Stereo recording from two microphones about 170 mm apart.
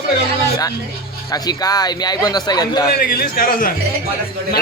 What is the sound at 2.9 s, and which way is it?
Speech, 60° left (ahead or behind).